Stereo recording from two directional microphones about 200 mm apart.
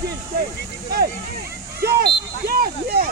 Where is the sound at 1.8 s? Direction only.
50° right (ahead or behind).